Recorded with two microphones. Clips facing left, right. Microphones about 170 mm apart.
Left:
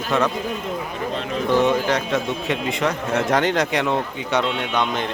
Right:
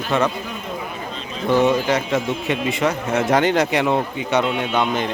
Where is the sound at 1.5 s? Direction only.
5° right (ahead or behind).